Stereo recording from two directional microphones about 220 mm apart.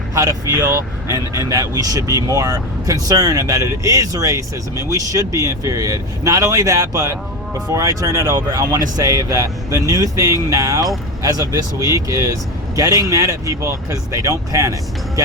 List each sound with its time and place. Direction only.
0.1 s speech: 15° right (ahead or behind)